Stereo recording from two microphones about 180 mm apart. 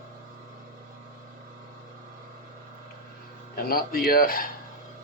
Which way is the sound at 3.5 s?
55° left (ahead or behind).